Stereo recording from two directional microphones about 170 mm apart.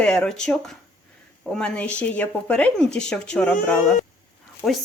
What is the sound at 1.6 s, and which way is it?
Speech, 5° left (ahead or behind).